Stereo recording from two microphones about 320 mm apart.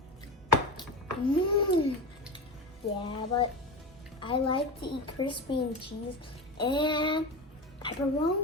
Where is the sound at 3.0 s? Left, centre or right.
Centre.